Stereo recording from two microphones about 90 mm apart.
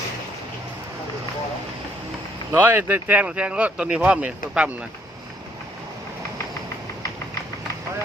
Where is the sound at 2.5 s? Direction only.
25° right (ahead or behind).